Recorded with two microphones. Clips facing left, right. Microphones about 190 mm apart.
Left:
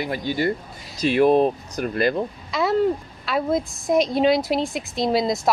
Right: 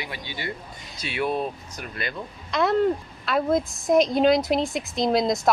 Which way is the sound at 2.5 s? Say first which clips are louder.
Even; centre (ahead or behind).